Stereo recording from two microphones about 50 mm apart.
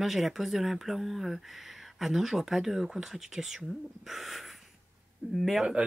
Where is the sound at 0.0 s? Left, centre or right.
Centre.